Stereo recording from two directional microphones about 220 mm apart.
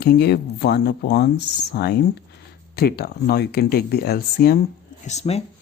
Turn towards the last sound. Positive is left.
turn(degrees=30)  # may be behind; listen again after turning